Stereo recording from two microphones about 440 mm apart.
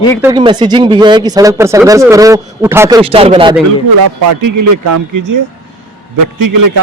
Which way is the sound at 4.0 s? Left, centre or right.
Right.